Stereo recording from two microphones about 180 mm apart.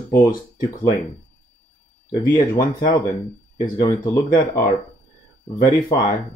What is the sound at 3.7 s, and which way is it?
Speech, 20° left (ahead or behind).